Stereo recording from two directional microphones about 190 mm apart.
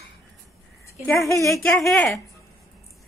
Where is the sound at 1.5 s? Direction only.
Centre (ahead or behind).